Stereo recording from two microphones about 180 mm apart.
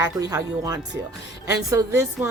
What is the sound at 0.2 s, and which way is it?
A woman's voice, 20° right (ahead or behind).